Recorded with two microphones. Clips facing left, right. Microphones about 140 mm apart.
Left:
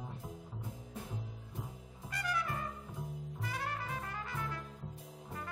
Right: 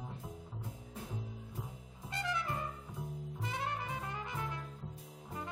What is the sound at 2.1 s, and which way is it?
Trumpet, 25° right (ahead or behind).